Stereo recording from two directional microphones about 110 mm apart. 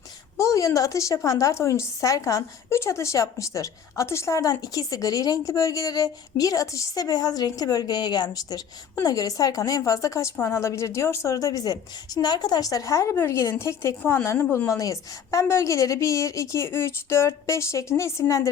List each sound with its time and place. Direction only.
0.3 s a woman's voice: 30° left (ahead or behind)
14.5 s a woman's voice: 25° left (ahead or behind)